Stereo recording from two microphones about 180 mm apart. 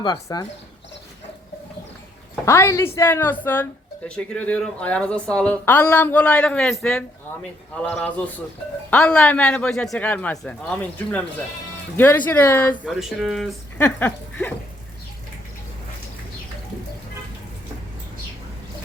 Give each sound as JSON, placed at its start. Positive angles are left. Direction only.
{"t": 0.0, "sound": "speech", "side_deg": 20}
{"t": 2.4, "sound": "speech", "side_deg": 15}
{"t": 12.8, "sound": "speech", "side_deg": 0}
{"t": 13.7, "sound": "a sound", "side_deg": 10}